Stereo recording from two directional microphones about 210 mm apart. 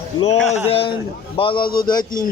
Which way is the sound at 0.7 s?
25° left (ahead or behind).